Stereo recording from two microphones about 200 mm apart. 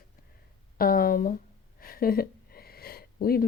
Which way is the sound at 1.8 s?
45° left (ahead or behind).